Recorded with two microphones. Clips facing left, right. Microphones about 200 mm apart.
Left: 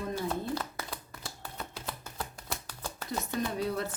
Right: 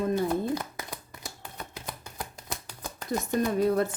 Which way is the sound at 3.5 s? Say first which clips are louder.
Right 11 dB; 50° right (ahead or behind).